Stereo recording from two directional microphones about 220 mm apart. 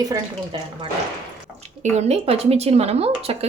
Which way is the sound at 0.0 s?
20° right (ahead or behind).